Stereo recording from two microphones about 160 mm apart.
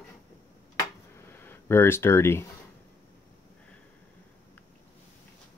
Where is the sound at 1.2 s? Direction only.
15° left (ahead or behind).